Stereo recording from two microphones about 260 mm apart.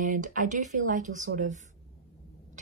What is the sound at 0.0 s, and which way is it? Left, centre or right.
A woman's voice, right.